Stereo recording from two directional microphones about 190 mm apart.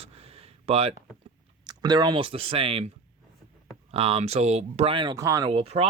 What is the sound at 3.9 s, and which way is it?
Speech, 30° right (ahead or behind).